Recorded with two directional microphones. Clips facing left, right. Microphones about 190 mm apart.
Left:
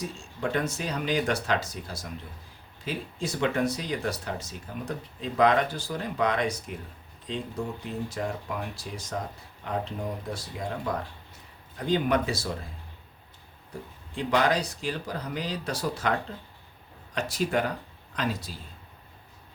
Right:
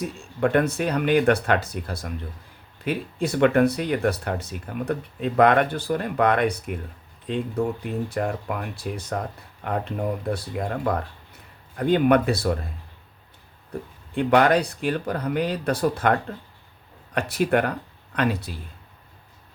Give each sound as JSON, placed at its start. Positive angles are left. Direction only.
{"t": 0.0, "sound": "speech", "side_deg": -60}
{"t": 14.2, "sound": "speech", "side_deg": -60}